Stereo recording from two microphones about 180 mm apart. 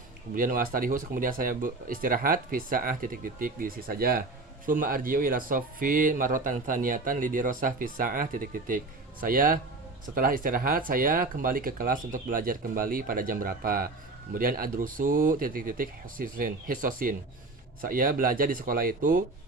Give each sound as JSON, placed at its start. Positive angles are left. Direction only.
{"t": 0.3, "sound": "speech", "side_deg": -50}